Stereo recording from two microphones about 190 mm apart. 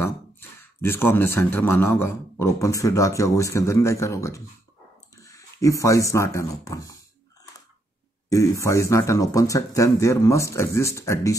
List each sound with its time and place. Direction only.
0.0 s speech: 10° left (ahead or behind)
8.3 s speech: 15° left (ahead or behind)